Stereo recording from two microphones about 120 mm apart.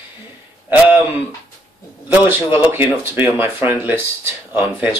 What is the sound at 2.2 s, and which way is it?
Speech, 20° right (ahead or behind).